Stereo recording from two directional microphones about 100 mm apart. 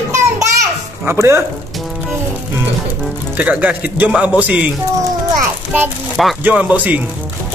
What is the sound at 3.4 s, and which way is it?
Speech, 15° right (ahead or behind).